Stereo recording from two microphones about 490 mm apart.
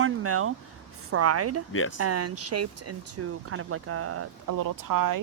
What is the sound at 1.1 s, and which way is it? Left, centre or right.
Speech, right.